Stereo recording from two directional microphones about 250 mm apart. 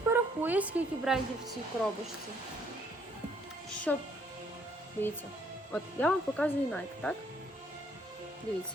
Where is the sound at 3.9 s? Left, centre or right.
Centre.